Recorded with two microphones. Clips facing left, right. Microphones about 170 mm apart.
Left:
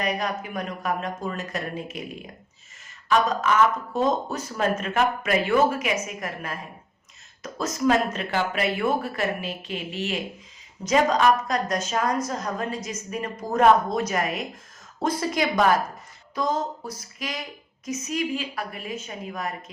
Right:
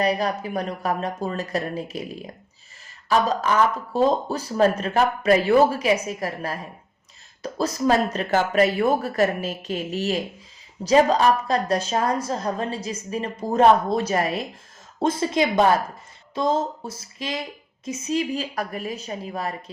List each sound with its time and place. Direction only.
0.0 s a woman's voice: 35° right (ahead or behind)
3.1 s a woman's voice: 35° right (ahead or behind)
14.9 s a sound: 25° right (ahead or behind)
18.5 s a woman's voice: 40° right (ahead or behind)